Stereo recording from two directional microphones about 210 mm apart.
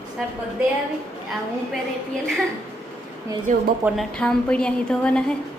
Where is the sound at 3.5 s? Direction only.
35° right (ahead or behind).